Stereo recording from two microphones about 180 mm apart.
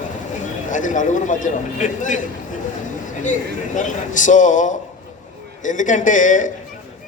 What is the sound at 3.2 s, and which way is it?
A man's voice, 45° left (ahead or behind).